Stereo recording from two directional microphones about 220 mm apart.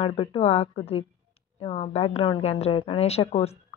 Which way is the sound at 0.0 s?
25° left (ahead or behind).